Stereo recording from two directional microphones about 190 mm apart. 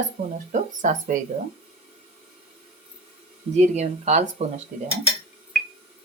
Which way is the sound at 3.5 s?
35° right (ahead or behind).